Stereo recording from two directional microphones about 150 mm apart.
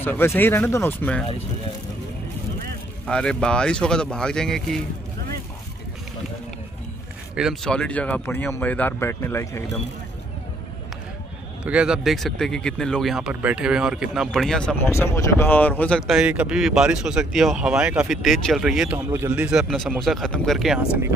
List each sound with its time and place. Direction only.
0.0 s speech: 15° left (ahead or behind)
3.1 s speech: 5° left (ahead or behind)
7.3 s speech: centre (ahead or behind); by 9.7 s 20° left (ahead or behind)
11.6 s speech: 5° right (ahead or behind)
14.9 s speech: 20° left (ahead or behind)
16.0 s speech: 5° right (ahead or behind)
19.1 s speech: 15° right (ahead or behind)
19.4 s speech: 5° right (ahead or behind)